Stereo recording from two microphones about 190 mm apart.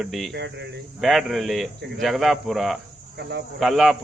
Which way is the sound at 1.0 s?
Centre (ahead or behind).